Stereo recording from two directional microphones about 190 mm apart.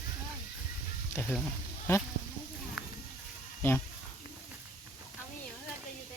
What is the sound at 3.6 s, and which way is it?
Speech, 15° left (ahead or behind).